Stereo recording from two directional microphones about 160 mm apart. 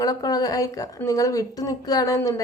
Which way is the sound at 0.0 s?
25° left (ahead or behind).